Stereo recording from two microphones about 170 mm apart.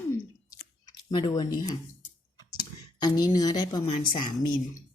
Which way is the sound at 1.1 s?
25° left (ahead or behind).